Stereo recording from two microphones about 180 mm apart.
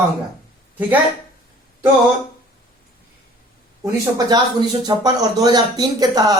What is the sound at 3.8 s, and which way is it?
Speech, 20° right (ahead or behind).